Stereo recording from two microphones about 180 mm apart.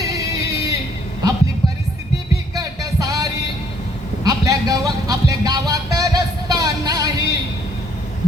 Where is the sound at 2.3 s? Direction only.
20° right (ahead or behind).